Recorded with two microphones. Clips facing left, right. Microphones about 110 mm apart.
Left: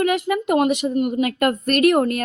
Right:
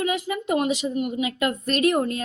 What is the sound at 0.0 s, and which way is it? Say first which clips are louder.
A woman's voice: left 6 dB; 65° left (ahead or behind).